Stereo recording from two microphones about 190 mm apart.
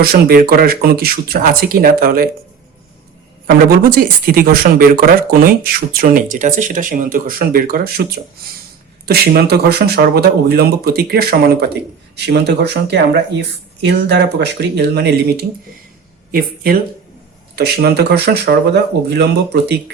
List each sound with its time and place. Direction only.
0.0 s speech: 55° right (ahead or behind)
3.4 s speech: 50° right (ahead or behind)